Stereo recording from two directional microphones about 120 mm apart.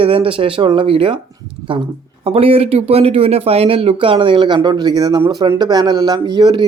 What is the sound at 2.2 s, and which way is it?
Speech, 50° right (ahead or behind).